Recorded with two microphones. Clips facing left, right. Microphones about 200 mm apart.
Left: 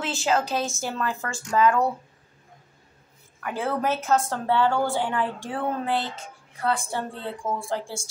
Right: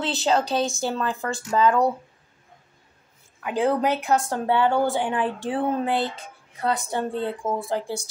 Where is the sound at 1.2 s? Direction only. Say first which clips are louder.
Right 5 dB; 20° right (ahead or behind).